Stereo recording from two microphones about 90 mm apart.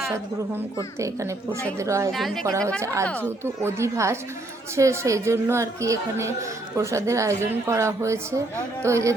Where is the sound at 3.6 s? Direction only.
30° right (ahead or behind).